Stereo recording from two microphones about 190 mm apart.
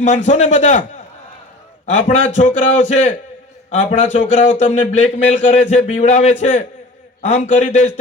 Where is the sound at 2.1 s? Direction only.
40° left (ahead or behind).